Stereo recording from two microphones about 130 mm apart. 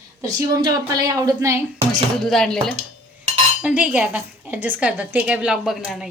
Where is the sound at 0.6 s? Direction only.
30° right (ahead or behind).